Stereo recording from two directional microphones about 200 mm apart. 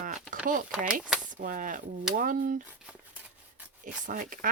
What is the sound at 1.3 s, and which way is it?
Speech, 45° right (ahead or behind).